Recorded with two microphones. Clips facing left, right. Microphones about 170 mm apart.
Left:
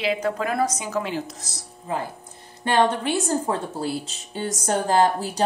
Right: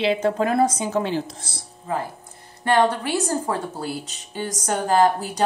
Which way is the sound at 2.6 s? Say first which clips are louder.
Right 1 dB; 20° left (ahead or behind).